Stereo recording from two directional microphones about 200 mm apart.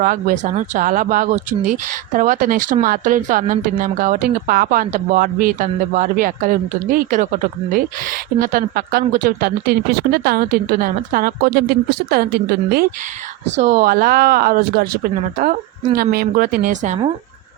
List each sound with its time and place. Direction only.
0.0 s speech: 45° right (ahead or behind)
8.4 s speech: 45° right (ahead or behind)
13.4 s speech: 35° right (ahead or behind)